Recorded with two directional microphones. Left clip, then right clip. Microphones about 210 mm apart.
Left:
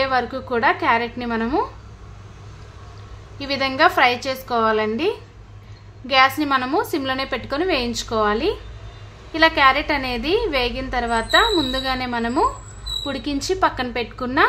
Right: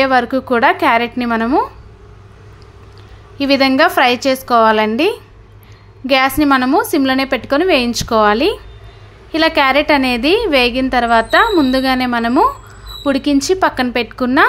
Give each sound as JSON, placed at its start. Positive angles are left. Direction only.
{"t": 0.0, "sound": "a woman's voice", "side_deg": -35}
{"t": 3.3, "sound": "a woman's voice", "side_deg": -40}